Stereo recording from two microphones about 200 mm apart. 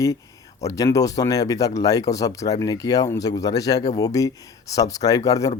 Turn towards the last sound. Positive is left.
turn(degrees=15)  # may be behind; listen again after turning